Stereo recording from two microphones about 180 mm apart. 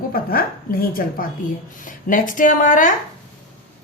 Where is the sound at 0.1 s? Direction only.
55° left (ahead or behind).